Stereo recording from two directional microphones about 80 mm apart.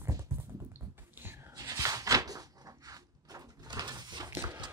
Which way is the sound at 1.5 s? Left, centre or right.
Right.